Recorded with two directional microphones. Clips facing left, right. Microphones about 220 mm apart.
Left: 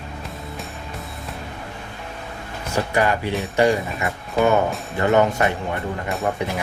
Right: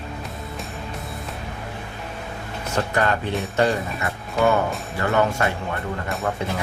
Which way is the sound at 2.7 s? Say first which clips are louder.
Left 2 dB; 10° left (ahead or behind).